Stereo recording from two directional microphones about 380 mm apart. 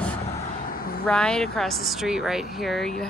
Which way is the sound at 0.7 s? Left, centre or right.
Left.